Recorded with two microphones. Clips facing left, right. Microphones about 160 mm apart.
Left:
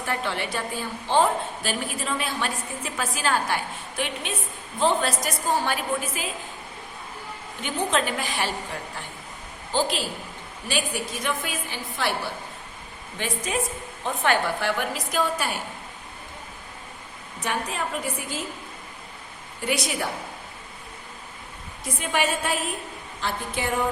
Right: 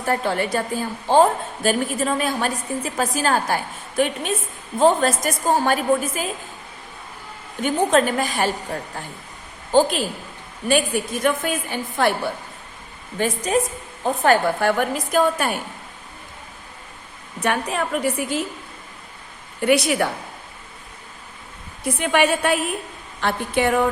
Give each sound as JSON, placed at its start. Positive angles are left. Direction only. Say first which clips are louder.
{"t": 0.0, "sound": "a woman's voice", "louder": "right 7 dB", "side_deg": -40}
{"t": 7.6, "sound": "a woman's voice", "louder": "right 8 dB", "side_deg": -45}
{"t": 9.7, "sound": "a woman's voice", "louder": "right 8 dB", "side_deg": -50}
{"t": 13.1, "sound": "a woman's voice", "louder": "right 7 dB", "side_deg": -40}
{"t": 17.4, "sound": "a woman's voice", "louder": "right 6 dB", "side_deg": -65}
{"t": 19.6, "sound": "a woman's voice", "louder": "right 9 dB", "side_deg": -65}
{"t": 21.9, "sound": "a woman's voice", "louder": "right 6 dB", "side_deg": -65}